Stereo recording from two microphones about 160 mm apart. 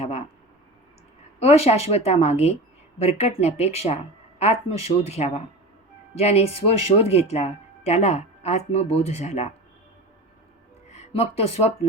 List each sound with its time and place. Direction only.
1.4 s speech: 40° left (ahead or behind)
10.8 s speech: 40° left (ahead or behind)